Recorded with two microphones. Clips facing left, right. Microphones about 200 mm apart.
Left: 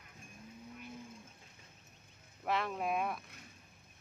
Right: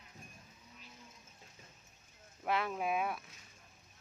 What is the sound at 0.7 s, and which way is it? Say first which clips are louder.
Livestock: left 10 dB; 55° left (ahead or behind).